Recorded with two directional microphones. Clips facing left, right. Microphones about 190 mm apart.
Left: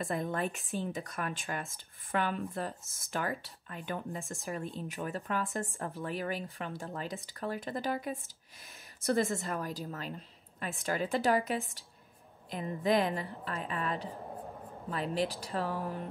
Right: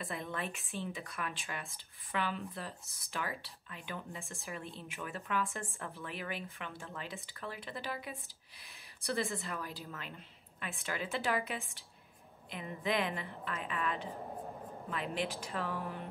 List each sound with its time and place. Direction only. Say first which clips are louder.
0.0 s a woman's voice: left 7 dB; 45° left (ahead or behind)